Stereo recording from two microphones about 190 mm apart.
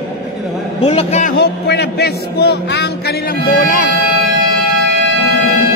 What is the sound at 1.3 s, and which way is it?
Speech, 60° left (ahead or behind).